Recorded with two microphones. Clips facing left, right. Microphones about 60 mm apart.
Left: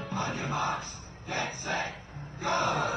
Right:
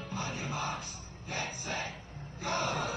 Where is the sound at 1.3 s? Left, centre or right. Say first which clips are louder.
Left 5 dB; left.